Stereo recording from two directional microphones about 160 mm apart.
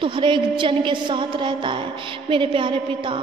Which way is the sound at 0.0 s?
30° right (ahead or behind).